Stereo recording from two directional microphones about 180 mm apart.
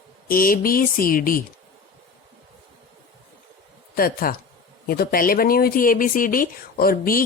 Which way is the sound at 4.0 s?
55° left (ahead or behind).